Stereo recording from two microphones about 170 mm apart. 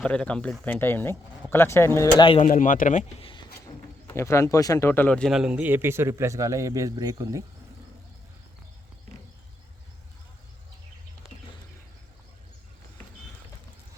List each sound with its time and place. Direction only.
0.0 s speech: 5° left (ahead or behind)
2.1 s speech: 30° left (ahead or behind)
2.4 s speech: 50° left (ahead or behind)
3.2 s speech: 30° left (ahead or behind)
4.1 s speech: 15° left (ahead or behind); by 7.4 s 20° right (ahead or behind)